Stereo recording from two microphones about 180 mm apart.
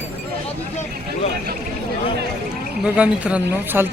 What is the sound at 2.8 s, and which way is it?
Speech, 5° right (ahead or behind).